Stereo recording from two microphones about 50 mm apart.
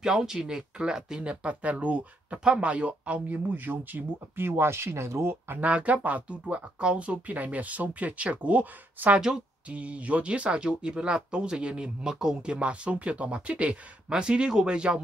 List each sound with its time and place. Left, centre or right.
0.0 s speech: centre
3.5 s speech: right
5.6 s speech: right